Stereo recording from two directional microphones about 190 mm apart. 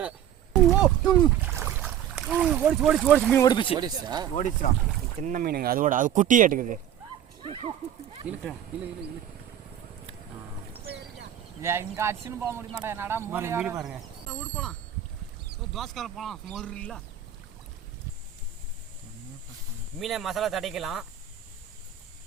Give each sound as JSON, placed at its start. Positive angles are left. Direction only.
{"t": 1.5, "sound": "speech", "side_deg": -10}
{"t": 3.4, "sound": "speech", "side_deg": 25}
{"t": 3.8, "sound": "speech", "side_deg": -20}
{"t": 4.4, "sound": "speech", "side_deg": 40}
{"t": 5.2, "sound": "speech", "side_deg": -45}
{"t": 7.4, "sound": "speech", "side_deg": -30}
{"t": 8.3, "sound": "speech", "side_deg": -10}
{"t": 11.6, "sound": "speech", "side_deg": -15}
{"t": 20.0, "sound": "speech", "side_deg": 0}